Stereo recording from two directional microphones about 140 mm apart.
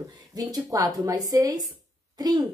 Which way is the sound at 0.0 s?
25° right (ahead or behind).